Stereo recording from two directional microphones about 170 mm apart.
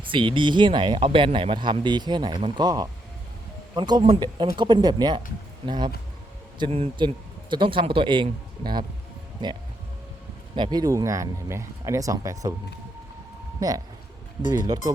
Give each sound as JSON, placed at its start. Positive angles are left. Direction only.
{"t": 0.1, "sound": "speech", "side_deg": -30}
{"t": 10.5, "sound": "speech", "side_deg": -25}
{"t": 13.6, "sound": "speech", "side_deg": -20}